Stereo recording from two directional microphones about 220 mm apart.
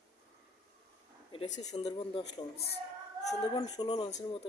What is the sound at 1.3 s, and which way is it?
Speech, 15° left (ahead or behind).